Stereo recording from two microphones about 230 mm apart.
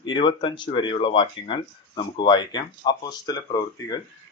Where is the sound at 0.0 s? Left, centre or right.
Left.